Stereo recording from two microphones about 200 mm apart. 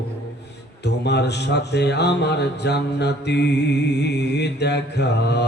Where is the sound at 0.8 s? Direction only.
55° left (ahead or behind).